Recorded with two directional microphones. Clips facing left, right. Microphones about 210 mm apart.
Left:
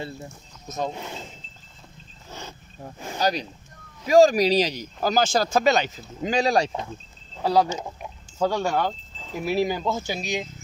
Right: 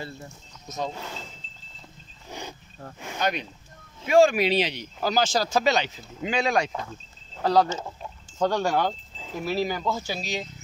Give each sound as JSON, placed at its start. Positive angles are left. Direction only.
{"t": 0.7, "sound": "speech", "side_deg": 50}
{"t": 0.9, "sound": "speech", "side_deg": 20}
{"t": 3.0, "sound": "speech", "side_deg": 35}
{"t": 7.4, "sound": "speech", "side_deg": 10}
{"t": 9.4, "sound": "speech", "side_deg": 15}